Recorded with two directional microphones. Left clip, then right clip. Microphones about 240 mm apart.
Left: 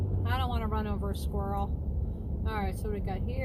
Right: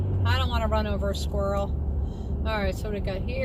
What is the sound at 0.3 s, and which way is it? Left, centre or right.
Vehicle, right.